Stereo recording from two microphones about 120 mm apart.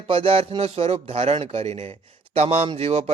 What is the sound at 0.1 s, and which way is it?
Speech, 50° right (ahead or behind).